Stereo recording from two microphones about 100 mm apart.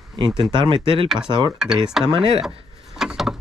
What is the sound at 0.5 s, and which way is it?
Speech, 55° right (ahead or behind).